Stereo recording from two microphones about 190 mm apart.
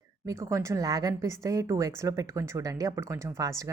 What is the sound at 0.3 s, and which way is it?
A woman's voice, 15° right (ahead or behind).